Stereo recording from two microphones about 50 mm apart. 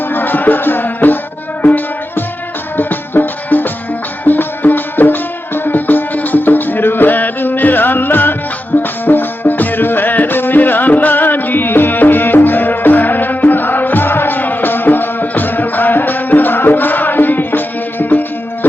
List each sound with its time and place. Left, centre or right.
0.1 s music: left